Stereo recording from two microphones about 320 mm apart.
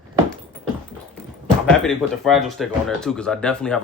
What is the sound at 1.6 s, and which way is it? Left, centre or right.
Speech, centre.